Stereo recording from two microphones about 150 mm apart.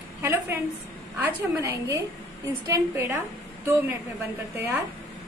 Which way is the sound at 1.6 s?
20° right (ahead or behind).